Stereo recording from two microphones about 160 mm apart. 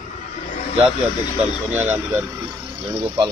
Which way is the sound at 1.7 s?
10° right (ahead or behind).